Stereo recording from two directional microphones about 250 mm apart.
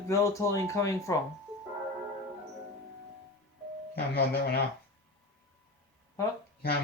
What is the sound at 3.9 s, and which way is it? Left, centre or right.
Speech, left.